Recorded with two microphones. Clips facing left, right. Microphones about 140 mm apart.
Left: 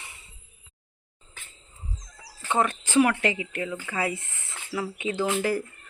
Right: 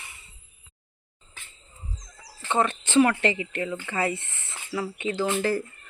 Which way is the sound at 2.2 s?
5° left (ahead or behind).